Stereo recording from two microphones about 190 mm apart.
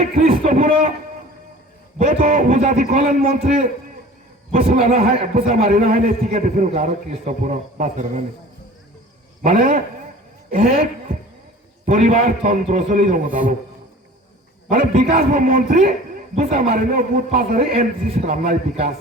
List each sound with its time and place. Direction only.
0.2 s a man's voice: 45° right (ahead or behind)
2.0 s a man's voice: 45° right (ahead or behind)
4.9 s a man's voice: 50° right (ahead or behind)
9.4 s a man's voice: 45° right (ahead or behind)
11.9 s a man's voice: 40° right (ahead or behind)
14.7 s a man's voice: 50° right (ahead or behind)